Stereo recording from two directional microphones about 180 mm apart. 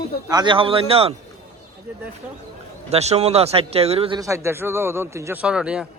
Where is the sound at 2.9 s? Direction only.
35° right (ahead or behind).